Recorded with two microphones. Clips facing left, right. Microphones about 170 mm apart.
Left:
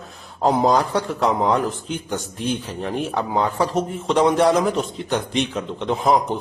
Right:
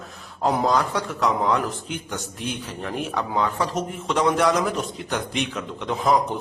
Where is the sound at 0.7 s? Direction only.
35° left (ahead or behind).